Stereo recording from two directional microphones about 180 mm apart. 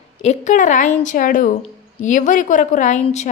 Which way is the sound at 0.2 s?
40° left (ahead or behind).